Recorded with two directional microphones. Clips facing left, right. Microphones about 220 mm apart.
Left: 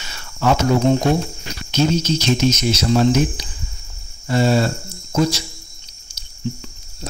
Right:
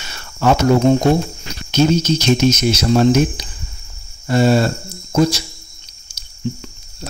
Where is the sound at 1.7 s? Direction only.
60° right (ahead or behind).